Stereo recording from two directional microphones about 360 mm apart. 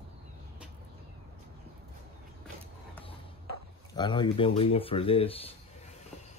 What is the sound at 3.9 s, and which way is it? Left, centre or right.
Speech, centre.